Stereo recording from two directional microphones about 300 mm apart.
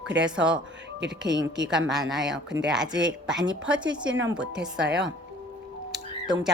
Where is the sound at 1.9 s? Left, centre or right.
Centre.